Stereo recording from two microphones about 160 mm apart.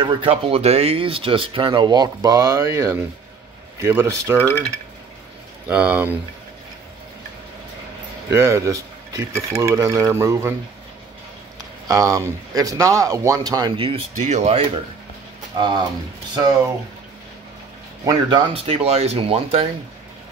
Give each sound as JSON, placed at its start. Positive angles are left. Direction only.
{"t": 0.0, "sound": "speech", "side_deg": -35}
{"t": 4.5, "sound": "speech", "side_deg": 10}
{"t": 5.7, "sound": "speech", "side_deg": -10}
{"t": 8.3, "sound": "speech", "side_deg": -15}
{"t": 11.9, "sound": "speech", "side_deg": -20}
{"t": 15.5, "sound": "speech", "side_deg": -30}
{"t": 18.0, "sound": "speech", "side_deg": -30}